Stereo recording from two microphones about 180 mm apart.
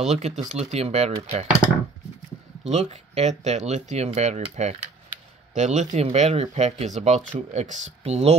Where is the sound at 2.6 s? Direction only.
35° right (ahead or behind).